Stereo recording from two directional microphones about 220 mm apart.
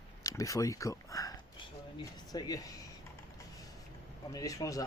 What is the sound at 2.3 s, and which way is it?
Speech, 15° left (ahead or behind).